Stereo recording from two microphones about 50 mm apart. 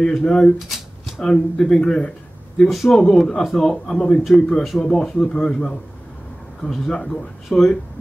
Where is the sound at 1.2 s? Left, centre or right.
Centre.